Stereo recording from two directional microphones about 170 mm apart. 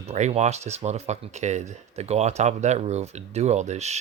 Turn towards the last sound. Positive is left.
turn(degrees=-40)  # may be behind; listen again after turning